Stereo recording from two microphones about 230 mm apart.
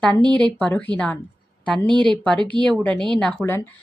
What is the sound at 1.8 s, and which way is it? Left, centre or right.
Speech, right.